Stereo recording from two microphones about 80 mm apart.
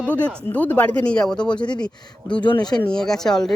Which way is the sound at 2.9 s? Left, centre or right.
Centre.